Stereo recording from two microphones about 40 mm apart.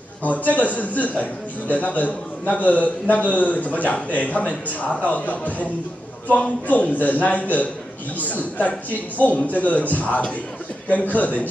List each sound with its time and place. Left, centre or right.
0.2 s a man's voice: left